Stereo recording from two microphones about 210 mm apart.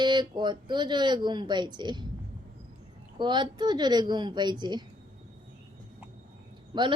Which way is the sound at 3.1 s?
20° right (ahead or behind).